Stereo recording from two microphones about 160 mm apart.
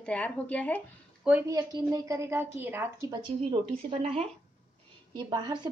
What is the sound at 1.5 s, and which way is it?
A woman's voice, 25° right (ahead or behind).